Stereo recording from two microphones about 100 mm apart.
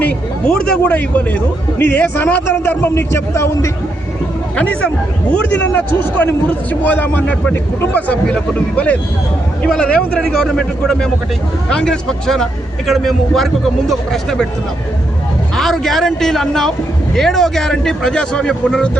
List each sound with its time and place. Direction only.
0.0 s a man's voice: 10° left (ahead or behind); by 3.7 s 30° left (ahead or behind)
4.5 s a man's voice: 15° left (ahead or behind)
6.1 s a man's voice: 15° left (ahead or behind)
15.5 s a man's voice: 5° left (ahead or behind)